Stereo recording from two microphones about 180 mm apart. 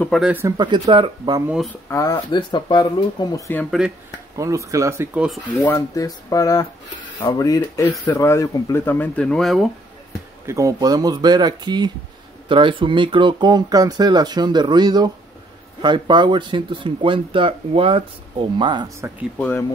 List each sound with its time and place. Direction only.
0.2 s speech: 10° right (ahead or behind)
0.6 s speech: 25° right (ahead or behind)
1.9 s speech: 20° left (ahead or behind)
4.4 s speech: 15° right (ahead or behind)
5.2 s speech: centre (ahead or behind)
5.7 s speech: 20° left (ahead or behind); by 9.7 s centre (ahead or behind)
10.4 s speech: 15° right (ahead or behind)
19.3 s speech: 10° left (ahead or behind)